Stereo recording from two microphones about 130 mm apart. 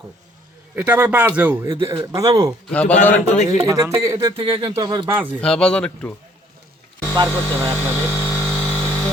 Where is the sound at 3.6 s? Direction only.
25° right (ahead or behind).